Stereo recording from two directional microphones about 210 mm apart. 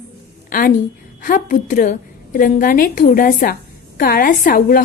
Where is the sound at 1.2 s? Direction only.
40° left (ahead or behind).